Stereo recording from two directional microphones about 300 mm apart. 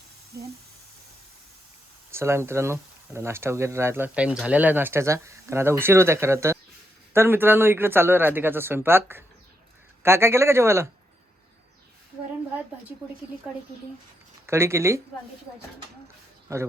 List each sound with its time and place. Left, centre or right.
2.0 s speech: centre
14.4 s speech: centre